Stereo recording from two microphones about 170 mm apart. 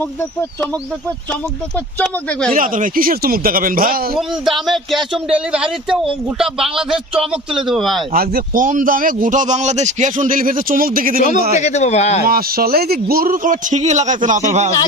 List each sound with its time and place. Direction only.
0.0 s speech: 10° left (ahead or behind)
2.5 s speech: 50° right (ahead or behind)
4.2 s speech: centre (ahead or behind)
8.1 s speech: 60° right (ahead or behind)
11.5 s speech: 45° left (ahead or behind)
12.3 s speech: 60° right (ahead or behind); by 14.7 s 45° right (ahead or behind)